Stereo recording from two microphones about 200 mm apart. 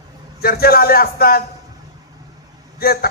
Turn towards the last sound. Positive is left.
turn(degrees=50)  # may be behind; listen again after turning